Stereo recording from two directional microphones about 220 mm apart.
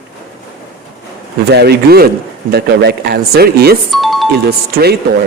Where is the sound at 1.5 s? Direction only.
45° right (ahead or behind).